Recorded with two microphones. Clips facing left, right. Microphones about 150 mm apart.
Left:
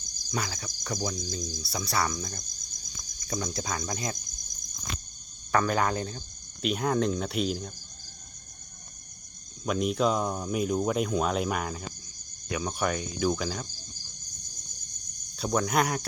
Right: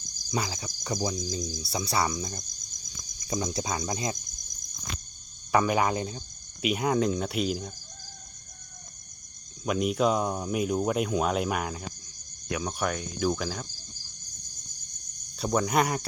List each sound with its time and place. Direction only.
0.3 s cricket: 15° right (ahead or behind)
5.5 s speech: 10° right (ahead or behind)
9.6 s speech: 5° right (ahead or behind)
15.4 s speech: centre (ahead or behind)